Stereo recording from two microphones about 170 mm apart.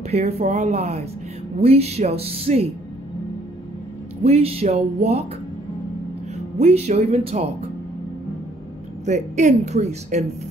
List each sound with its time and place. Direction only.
0.1 s speech: 40° right (ahead or behind)
4.2 s speech: 35° right (ahead or behind)
6.3 s speech: 40° right (ahead or behind)
9.0 s speech: 45° right (ahead or behind)